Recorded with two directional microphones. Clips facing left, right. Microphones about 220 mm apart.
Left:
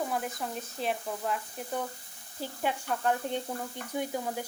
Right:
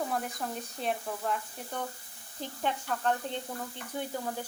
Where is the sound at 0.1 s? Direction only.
Centre (ahead or behind).